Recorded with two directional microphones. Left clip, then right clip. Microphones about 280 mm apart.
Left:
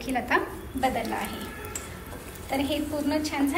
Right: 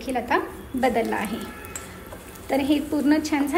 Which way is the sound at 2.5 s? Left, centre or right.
Right.